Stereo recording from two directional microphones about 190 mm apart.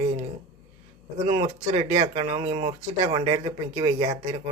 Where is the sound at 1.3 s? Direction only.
30° right (ahead or behind).